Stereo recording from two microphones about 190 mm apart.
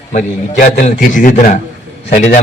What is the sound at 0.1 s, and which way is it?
A man's voice, 40° left (ahead or behind).